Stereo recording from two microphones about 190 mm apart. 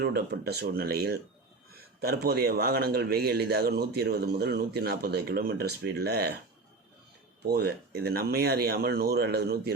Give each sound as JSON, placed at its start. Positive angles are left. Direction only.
{"t": 0.0, "sound": "a man's voice", "side_deg": -55}
{"t": 7.4, "sound": "a man's voice", "side_deg": -55}